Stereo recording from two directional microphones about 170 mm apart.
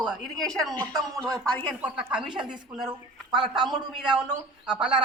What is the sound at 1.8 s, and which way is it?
Speech, 5° right (ahead or behind).